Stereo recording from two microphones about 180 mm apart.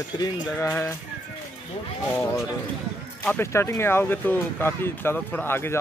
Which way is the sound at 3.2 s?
10° left (ahead or behind).